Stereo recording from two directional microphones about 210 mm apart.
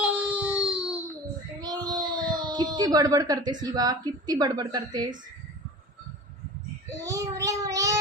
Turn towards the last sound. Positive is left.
turn(degrees=-15)  # may be behind; listen again after turning